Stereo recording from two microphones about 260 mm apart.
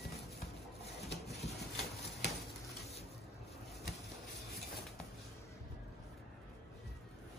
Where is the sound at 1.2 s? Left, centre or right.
Left.